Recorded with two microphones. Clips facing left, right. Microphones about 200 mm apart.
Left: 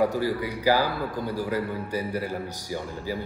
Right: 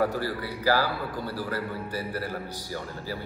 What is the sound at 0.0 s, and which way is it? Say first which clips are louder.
A man's voice: left 3 dB; 15° left (ahead or behind).